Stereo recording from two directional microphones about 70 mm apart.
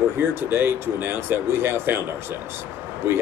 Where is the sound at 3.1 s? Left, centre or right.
Right.